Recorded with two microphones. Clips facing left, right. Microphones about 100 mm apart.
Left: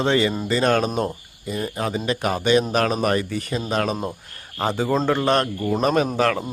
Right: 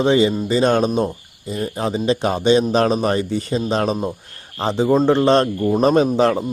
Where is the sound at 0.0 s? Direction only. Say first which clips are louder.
Right 4 dB; 20° right (ahead or behind).